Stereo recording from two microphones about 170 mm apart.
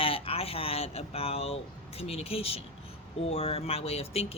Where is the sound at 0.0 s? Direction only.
35° left (ahead or behind).